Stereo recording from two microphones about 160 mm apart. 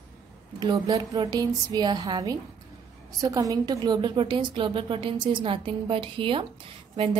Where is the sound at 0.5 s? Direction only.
25° right (ahead or behind).